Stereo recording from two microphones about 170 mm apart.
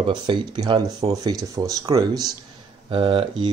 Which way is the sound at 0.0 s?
30° right (ahead or behind).